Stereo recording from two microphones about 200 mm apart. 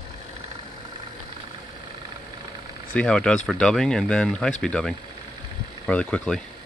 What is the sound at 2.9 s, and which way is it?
Speech, 5° left (ahead or behind).